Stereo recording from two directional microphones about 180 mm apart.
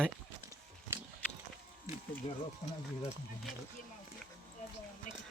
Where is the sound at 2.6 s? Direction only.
40° left (ahead or behind).